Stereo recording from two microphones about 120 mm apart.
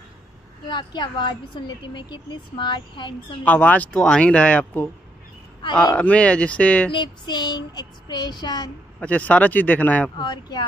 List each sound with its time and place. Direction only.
0.7 s child singing: 40° left (ahead or behind)
3.4 s speech: 15° left (ahead or behind)
6.9 s child singing: 40° left (ahead or behind)
9.0 s speech: 10° left (ahead or behind)
10.1 s child singing: 40° left (ahead or behind)